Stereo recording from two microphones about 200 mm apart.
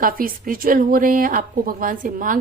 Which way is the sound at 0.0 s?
45° right (ahead or behind).